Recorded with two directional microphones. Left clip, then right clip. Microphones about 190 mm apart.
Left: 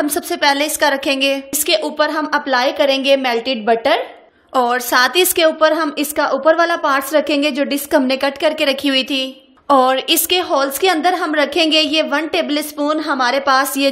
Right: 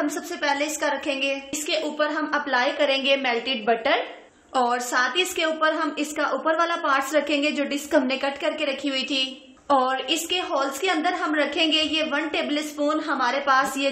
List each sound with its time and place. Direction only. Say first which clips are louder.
0.0 s a woman's voice: left 10 dB; 50° left (ahead or behind)
9.8 s a woman's voice: left 10 dB; 55° left (ahead or behind)